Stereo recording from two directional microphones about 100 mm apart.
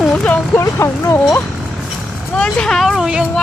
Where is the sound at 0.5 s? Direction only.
30° left (ahead or behind).